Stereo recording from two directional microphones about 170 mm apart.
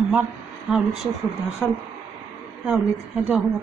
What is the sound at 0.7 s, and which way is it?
Speech, 5° right (ahead or behind).